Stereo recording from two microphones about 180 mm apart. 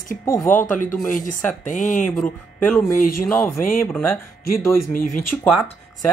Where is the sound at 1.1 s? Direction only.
45° left (ahead or behind).